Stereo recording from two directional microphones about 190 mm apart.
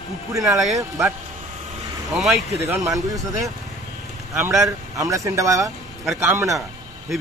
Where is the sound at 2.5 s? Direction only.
15° right (ahead or behind).